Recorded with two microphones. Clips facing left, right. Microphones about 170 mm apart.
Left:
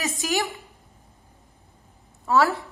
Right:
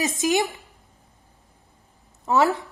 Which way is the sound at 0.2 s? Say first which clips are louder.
Right 5 dB; 20° right (ahead or behind).